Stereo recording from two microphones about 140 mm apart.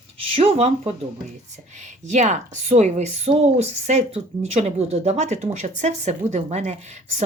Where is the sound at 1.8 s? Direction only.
60° right (ahead or behind).